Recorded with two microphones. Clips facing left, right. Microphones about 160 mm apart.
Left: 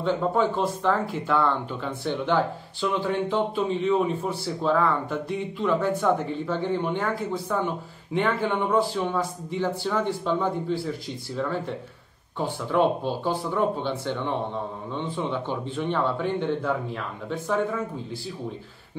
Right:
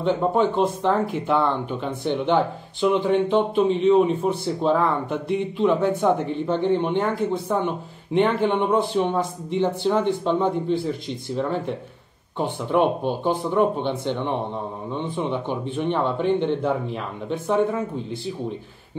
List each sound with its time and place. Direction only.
0.0 s speech: 20° right (ahead or behind)